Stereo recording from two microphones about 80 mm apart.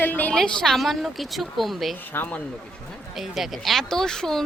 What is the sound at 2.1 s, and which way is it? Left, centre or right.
Speech, centre.